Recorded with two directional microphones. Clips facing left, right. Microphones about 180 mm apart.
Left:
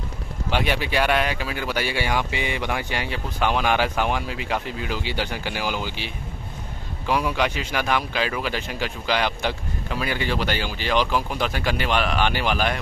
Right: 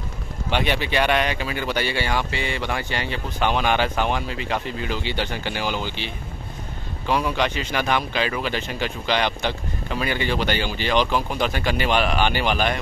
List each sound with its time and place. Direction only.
0.5 s speech: 5° left (ahead or behind)